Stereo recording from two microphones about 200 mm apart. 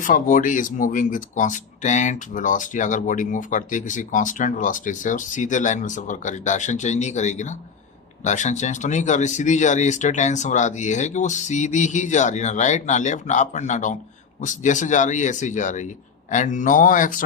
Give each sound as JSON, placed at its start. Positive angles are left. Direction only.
{"t": 0.0, "sound": "speech", "side_deg": 40}